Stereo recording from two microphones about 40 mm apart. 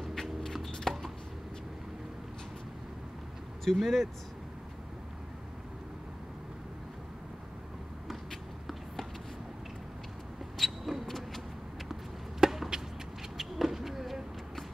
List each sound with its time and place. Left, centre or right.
0.0 s chopping: centre
3.6 s speech: centre
10.6 s vehicle: centre
11.9 s chop: centre
13.4 s a sound: centre